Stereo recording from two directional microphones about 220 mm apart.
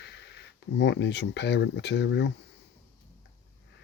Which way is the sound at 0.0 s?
50° left (ahead or behind).